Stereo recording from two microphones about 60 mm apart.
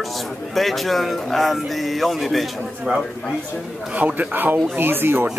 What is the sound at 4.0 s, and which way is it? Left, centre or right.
Speech, right.